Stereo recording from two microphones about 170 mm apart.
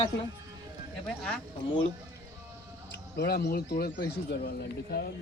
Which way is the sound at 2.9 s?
75° left (ahead or behind).